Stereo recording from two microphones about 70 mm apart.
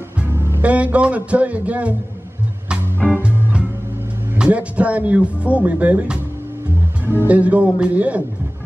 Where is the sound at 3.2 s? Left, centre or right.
Centre.